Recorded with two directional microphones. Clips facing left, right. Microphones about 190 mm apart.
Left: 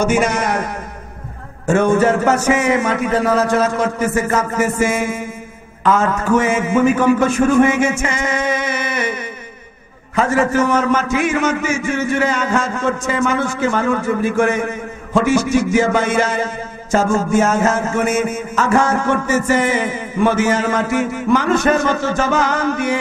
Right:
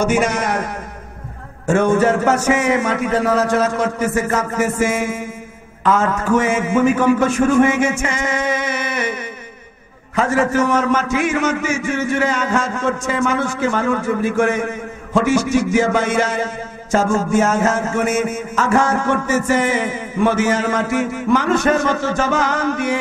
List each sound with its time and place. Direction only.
0.1 s a man's voice: 15° left (ahead or behind)
1.8 s a man's voice: 25° left (ahead or behind)
4.3 s a man's voice: 25° left (ahead or behind)
4.6 s a man's voice: 15° left (ahead or behind)
8.1 s a sound: 10° left (ahead or behind)
10.1 s a man's voice: 25° left (ahead or behind)
19.2 s a man's voice: 10° left (ahead or behind)